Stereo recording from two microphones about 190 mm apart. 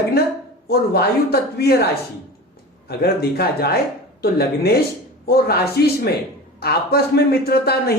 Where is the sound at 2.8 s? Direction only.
55° left (ahead or behind).